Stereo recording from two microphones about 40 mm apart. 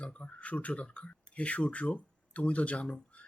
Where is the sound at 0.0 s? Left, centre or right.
Left.